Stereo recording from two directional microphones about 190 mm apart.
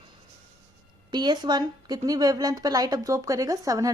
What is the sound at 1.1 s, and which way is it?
A woman's voice, 20° right (ahead or behind).